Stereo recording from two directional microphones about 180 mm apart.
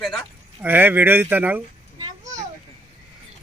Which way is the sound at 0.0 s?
5° left (ahead or behind).